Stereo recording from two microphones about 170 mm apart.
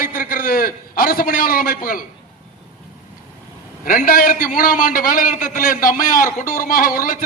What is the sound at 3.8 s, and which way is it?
A man's voice, 55° left (ahead or behind).